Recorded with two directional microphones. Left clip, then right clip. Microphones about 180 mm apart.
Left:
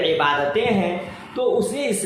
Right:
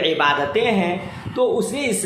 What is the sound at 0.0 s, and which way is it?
A woman's voice, 20° right (ahead or behind).